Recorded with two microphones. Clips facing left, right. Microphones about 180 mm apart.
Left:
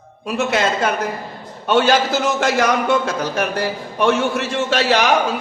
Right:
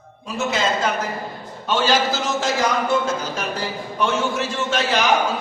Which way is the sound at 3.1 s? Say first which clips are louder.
Left 4 dB; 65° left (ahead or behind).